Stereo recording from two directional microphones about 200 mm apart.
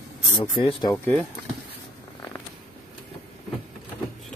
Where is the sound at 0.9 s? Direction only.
5° left (ahead or behind).